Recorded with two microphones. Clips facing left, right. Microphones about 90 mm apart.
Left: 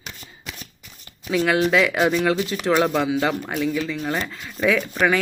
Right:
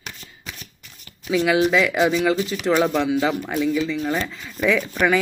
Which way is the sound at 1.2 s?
Centre (ahead or behind).